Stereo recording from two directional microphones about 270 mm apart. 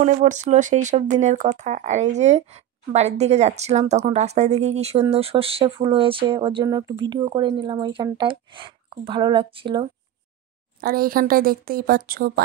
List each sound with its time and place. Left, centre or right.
0.0 s speech: right
10.8 s speech: right